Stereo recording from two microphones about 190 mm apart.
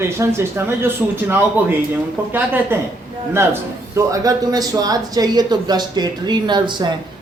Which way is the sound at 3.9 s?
15° right (ahead or behind).